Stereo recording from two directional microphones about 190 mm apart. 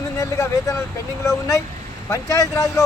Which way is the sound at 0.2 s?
15° left (ahead or behind).